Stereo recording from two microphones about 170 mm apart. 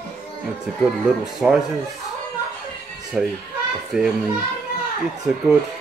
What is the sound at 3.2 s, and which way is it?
Speech, 5° right (ahead or behind).